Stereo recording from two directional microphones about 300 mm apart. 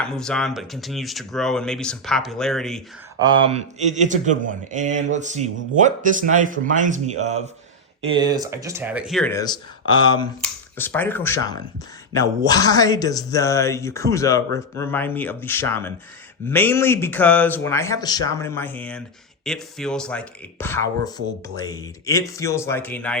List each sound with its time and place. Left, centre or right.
0.0 s speech: centre
3.2 s a man's voice: centre